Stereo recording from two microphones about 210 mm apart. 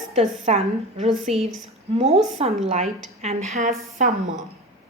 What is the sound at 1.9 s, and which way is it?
A woman's voice, 30° right (ahead or behind).